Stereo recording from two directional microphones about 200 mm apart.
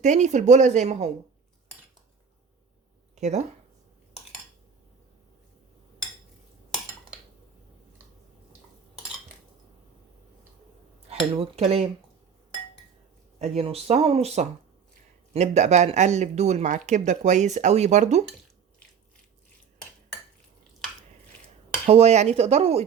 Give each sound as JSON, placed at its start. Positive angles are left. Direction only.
{"t": 0.0, "sound": "speech", "side_deg": -35}
{"t": 3.2, "sound": "speech", "side_deg": -35}
{"t": 11.3, "sound": "speech", "side_deg": -30}
{"t": 13.4, "sound": "speech", "side_deg": -30}
{"t": 21.8, "sound": "speech", "side_deg": -30}